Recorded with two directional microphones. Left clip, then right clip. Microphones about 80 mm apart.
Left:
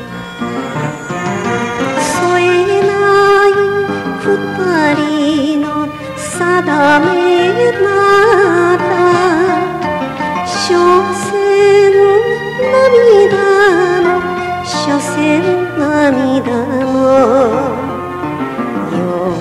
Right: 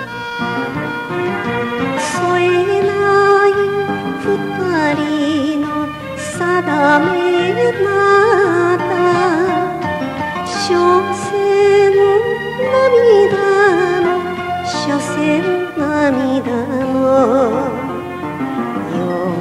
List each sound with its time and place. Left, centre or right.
2.0 s music: centre
10.7 s music: centre